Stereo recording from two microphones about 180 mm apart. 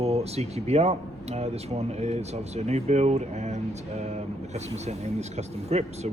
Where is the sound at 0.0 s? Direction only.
35° right (ahead or behind).